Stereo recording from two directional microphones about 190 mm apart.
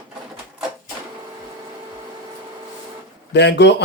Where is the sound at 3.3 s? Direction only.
65° left (ahead or behind).